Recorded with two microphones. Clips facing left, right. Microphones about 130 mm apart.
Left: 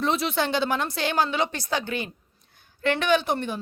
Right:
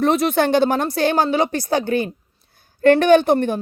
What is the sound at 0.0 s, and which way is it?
Speech, 50° right (ahead or behind).